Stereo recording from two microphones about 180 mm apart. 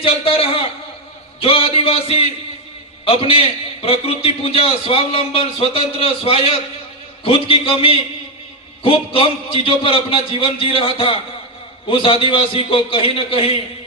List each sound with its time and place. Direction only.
0.0 s a man's voice: 30° left (ahead or behind)